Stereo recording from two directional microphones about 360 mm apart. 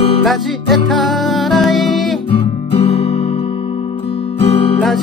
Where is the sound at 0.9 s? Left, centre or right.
Centre.